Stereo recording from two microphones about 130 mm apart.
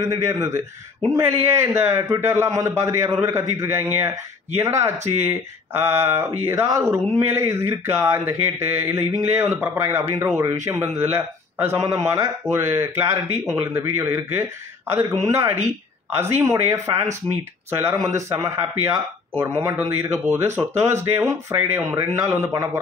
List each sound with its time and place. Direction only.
0.0 s a man's voice: 25° right (ahead or behind)